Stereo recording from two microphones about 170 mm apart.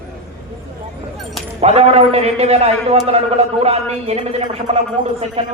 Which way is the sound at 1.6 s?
40° right (ahead or behind).